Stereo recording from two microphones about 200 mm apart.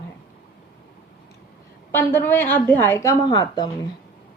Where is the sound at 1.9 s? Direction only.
10° left (ahead or behind).